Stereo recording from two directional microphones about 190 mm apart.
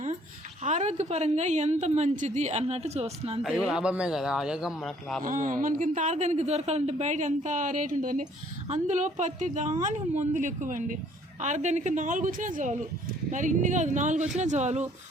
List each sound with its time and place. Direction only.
0.6 s a woman's voice: 35° right (ahead or behind)
3.4 s speech: centre (ahead or behind)
5.2 s a woman's voice: 45° right (ahead or behind)